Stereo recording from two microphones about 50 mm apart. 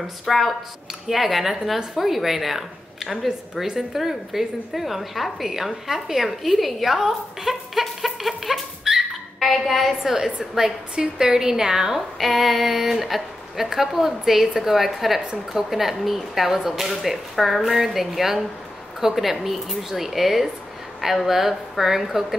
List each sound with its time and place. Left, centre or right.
0.0 s a woman's voice: centre
7.1 s a sound: centre
9.5 s a woman's voice: centre